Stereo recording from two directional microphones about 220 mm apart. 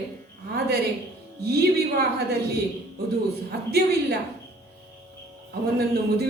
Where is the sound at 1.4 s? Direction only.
45° right (ahead or behind).